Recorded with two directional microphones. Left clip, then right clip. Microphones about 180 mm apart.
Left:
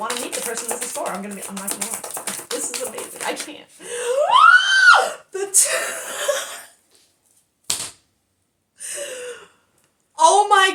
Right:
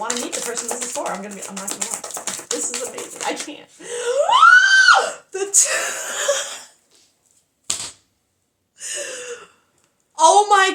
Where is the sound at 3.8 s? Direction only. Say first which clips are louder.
Right 1 dB; 25° right (ahead or behind).